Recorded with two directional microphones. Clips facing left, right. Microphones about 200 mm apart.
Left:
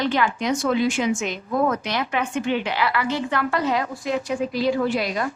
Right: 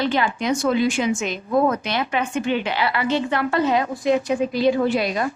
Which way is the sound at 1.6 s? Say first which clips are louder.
Right 2 dB; 30° right (ahead or behind).